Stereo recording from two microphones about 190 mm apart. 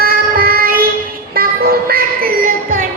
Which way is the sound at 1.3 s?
50° right (ahead or behind).